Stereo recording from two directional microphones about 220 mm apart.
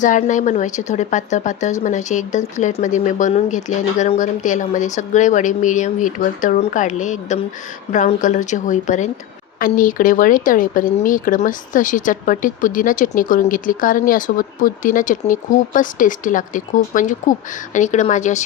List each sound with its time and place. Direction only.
0.0 s speech: 35° left (ahead or behind)